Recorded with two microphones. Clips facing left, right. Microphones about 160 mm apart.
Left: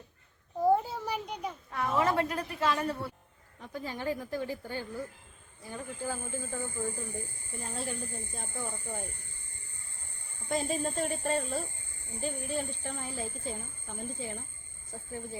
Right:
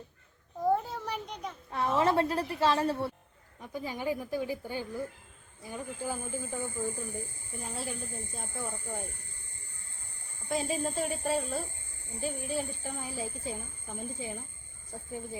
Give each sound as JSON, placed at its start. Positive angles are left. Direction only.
{"t": 0.6, "sound": "a sound", "side_deg": 10}
{"t": 1.7, "sound": "a woman's voice", "side_deg": -30}
{"t": 3.6, "sound": "speech", "side_deg": -10}
{"t": 10.5, "sound": "speech", "side_deg": 0}